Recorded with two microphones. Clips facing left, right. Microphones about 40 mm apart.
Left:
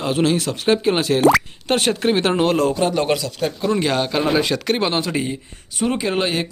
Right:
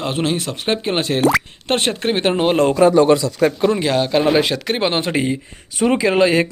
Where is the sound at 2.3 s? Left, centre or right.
Centre.